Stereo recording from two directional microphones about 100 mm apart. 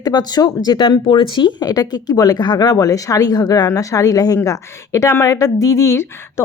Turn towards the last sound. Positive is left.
turn(degrees=25)  # may be behind; listen again after turning